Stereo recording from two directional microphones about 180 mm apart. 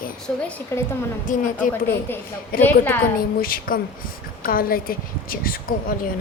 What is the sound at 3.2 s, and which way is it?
A woman's voice, 55° left (ahead or behind).